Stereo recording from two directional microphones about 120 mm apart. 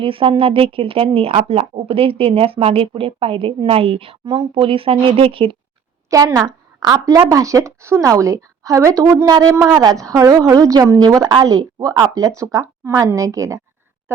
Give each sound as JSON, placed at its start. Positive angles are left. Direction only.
{"t": 0.0, "sound": "speech", "side_deg": -50}
{"t": 6.1, "sound": "a woman's voice", "side_deg": -30}